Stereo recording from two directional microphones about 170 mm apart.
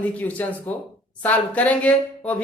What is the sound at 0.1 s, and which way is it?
Speech, 10° left (ahead or behind).